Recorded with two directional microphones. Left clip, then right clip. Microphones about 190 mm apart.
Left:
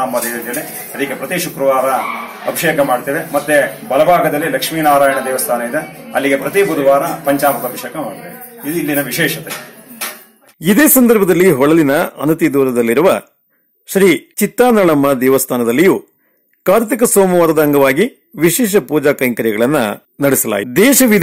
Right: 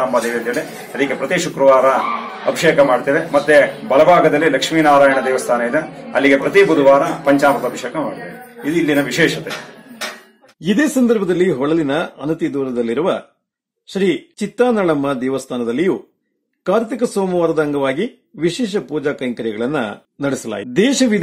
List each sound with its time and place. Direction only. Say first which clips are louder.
0.9 s a man's voice: right 1 dB; 5° right (ahead or behind)
8.8 s a man's voice: right 1 dB; 5° right (ahead or behind)
10.6 s speech: left 5 dB; 25° left (ahead or behind)